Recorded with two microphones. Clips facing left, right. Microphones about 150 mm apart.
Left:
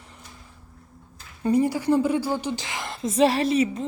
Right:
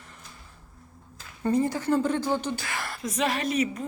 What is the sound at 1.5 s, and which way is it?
A woman's voice, 10° left (ahead or behind).